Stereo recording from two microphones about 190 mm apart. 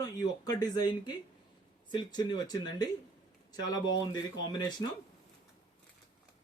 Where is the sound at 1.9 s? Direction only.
25° left (ahead or behind).